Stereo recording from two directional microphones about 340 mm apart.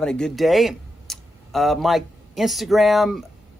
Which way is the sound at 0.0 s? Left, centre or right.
Centre.